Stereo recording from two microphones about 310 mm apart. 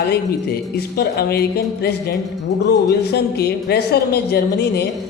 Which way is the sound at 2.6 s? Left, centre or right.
Left.